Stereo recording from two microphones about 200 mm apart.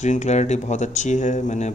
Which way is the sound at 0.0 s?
35° left (ahead or behind).